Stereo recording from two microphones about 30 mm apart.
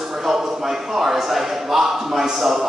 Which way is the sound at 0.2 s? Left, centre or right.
Centre.